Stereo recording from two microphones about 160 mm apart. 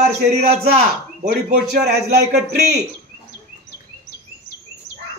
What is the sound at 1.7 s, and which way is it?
Speech, 85° right.